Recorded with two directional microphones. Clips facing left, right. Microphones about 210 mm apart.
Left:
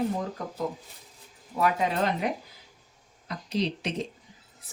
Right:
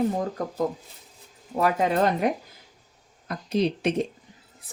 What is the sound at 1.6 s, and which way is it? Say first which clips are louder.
Speech: right 4 dB; 45° right (ahead or behind).